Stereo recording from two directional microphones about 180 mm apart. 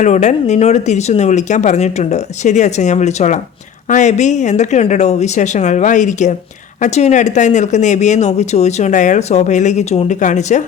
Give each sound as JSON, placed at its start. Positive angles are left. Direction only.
{"t": 0.0, "sound": "speech", "side_deg": 40}